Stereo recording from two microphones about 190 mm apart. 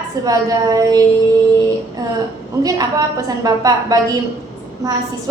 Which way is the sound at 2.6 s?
20° right (ahead or behind).